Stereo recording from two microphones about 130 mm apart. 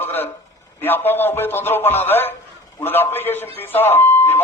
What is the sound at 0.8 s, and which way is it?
Speech, 15° left (ahead or behind).